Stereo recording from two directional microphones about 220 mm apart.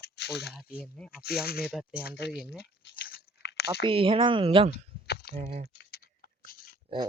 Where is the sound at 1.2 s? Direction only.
45° left (ahead or behind).